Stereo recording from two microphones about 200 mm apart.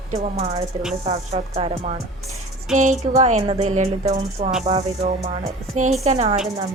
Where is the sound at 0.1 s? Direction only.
30° right (ahead or behind).